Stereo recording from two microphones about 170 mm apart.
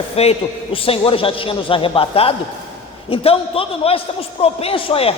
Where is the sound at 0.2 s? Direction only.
35° left (ahead or behind).